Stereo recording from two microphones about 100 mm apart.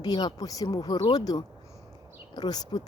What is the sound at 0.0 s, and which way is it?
Speech, 45° left (ahead or behind).